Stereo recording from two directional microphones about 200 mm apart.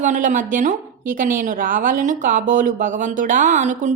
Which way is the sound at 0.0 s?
40° right (ahead or behind).